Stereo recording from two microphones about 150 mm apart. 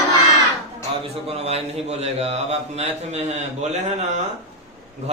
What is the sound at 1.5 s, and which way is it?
Speech, 45° right (ahead or behind).